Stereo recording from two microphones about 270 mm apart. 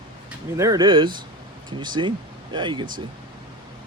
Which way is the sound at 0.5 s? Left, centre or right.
Centre.